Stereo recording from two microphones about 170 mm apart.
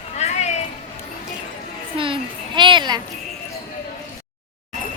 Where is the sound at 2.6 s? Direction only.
25° right (ahead or behind).